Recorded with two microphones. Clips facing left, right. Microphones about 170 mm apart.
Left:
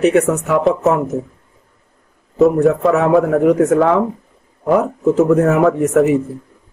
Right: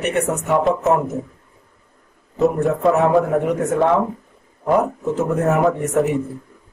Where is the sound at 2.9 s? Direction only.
90° left.